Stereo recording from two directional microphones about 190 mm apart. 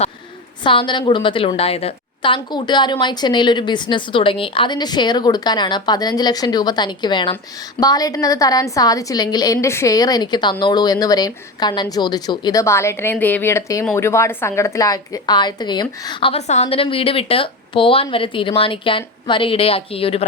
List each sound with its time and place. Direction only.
0.6 s a woman's voice: 25° left (ahead or behind)